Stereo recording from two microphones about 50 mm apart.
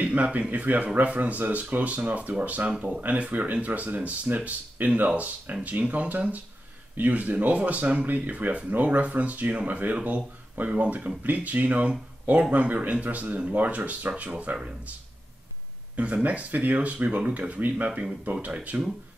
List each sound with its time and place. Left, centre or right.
0.0 s speech: right
16.0 s speech: right